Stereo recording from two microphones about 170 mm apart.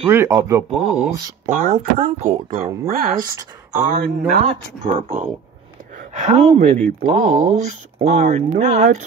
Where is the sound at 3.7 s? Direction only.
45° right (ahead or behind).